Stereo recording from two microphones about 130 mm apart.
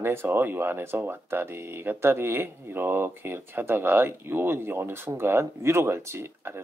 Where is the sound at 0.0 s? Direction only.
15° right (ahead or behind).